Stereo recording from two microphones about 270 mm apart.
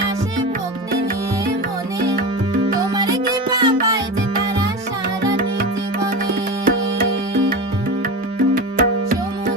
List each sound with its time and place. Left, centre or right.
2.9 s music: centre
6.7 s music: right
8.5 s music: right